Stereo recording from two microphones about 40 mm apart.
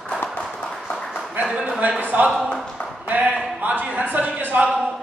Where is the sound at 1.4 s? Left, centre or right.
Right.